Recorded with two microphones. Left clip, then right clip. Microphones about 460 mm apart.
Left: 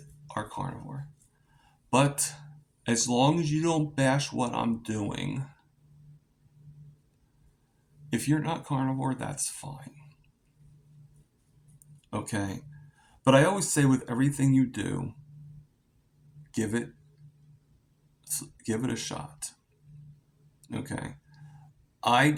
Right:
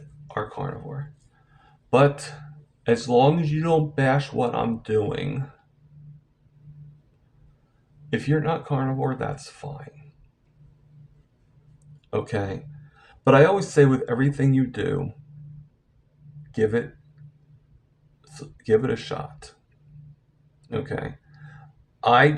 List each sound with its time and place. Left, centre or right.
1.9 s speech: left
8.1 s speech: left
12.1 s speech: left
16.5 s speech: left
18.2 s speech: left
20.6 s burping: left
22.0 s speech: left